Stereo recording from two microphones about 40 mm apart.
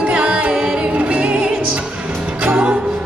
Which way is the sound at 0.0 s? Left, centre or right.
Right.